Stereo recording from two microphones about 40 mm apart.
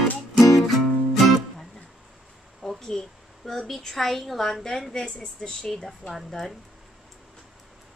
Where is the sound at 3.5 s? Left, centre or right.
Centre.